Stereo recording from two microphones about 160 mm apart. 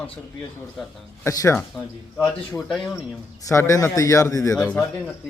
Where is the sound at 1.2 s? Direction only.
20° left (ahead or behind).